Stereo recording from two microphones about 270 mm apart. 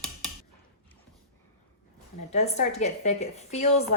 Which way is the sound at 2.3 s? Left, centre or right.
Left.